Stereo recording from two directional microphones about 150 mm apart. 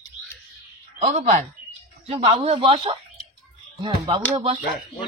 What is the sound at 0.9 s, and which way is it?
Speech, 50° right (ahead or behind).